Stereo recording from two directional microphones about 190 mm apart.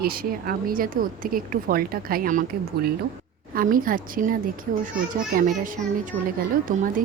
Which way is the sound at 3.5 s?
45° right (ahead or behind).